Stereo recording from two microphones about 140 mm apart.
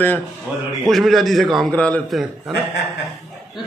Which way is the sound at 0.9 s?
Centre (ahead or behind).